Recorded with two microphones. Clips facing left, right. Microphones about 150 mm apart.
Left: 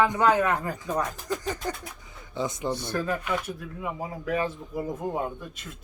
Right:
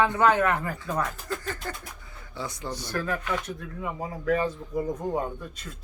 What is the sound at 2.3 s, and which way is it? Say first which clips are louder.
Speech: left 6 dB; 20° left (ahead or behind).